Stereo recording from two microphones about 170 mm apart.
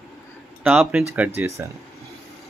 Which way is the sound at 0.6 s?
10° right (ahead or behind).